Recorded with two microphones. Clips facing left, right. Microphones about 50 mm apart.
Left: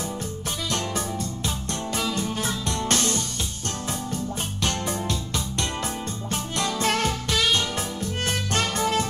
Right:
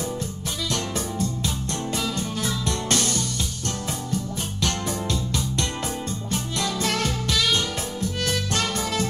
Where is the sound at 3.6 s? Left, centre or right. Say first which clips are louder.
Left 1 dB; left.